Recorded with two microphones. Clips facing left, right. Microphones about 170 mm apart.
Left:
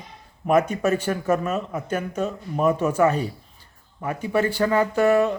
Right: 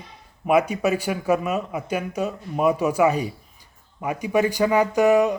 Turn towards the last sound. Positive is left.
turn(degrees=-15)  # may be behind; listen again after turning